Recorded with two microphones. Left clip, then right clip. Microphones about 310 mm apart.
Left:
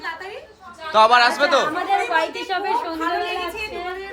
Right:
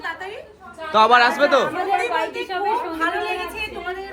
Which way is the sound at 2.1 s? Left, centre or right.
Left.